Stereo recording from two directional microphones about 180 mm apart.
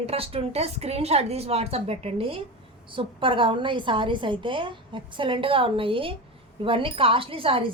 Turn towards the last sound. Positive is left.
turn(degrees=-30)  # may be behind; listen again after turning